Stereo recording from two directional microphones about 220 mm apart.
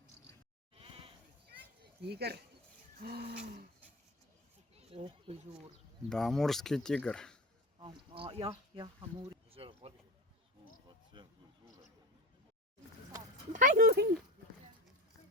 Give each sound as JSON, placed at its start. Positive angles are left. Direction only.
{"t": 0.8, "sound": "goat", "side_deg": -25}
{"t": 1.5, "sound": "a sound", "side_deg": -45}
{"t": 3.0, "sound": "livestock", "side_deg": -45}
{"t": 4.7, "sound": "a sound", "side_deg": -25}
{"t": 6.1, "sound": "speech", "side_deg": 0}
{"t": 7.8, "sound": "speech", "side_deg": -20}
{"t": 11.1, "sound": "speech", "side_deg": -20}
{"t": 13.5, "sound": "speech", "side_deg": -35}